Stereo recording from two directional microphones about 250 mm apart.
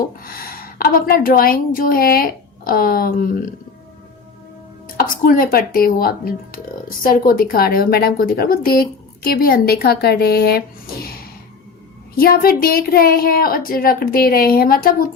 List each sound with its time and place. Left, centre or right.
0.2 s a woman's voice: left
4.9 s a woman's voice: left
12.1 s a woman's voice: left